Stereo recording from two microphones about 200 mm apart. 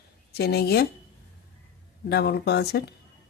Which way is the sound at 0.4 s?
55° left (ahead or behind).